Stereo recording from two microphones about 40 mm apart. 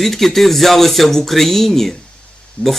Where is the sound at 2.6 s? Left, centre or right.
Left.